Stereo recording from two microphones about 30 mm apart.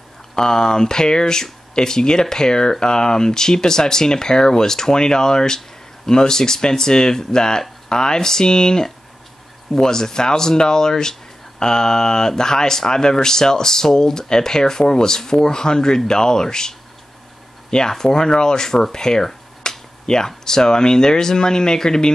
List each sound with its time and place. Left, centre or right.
0.4 s speech: left